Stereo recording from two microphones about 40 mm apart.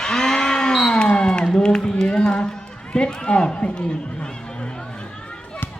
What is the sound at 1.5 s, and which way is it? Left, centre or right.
Speech, left.